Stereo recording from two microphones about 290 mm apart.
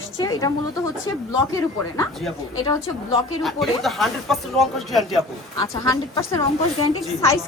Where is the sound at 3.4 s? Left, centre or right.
Centre.